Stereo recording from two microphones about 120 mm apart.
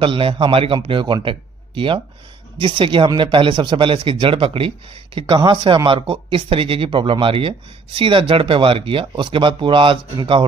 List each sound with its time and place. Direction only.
0.0 s speech: 45° right (ahead or behind)